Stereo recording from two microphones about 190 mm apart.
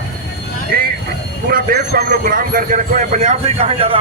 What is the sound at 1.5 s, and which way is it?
Speech, 50° right (ahead or behind).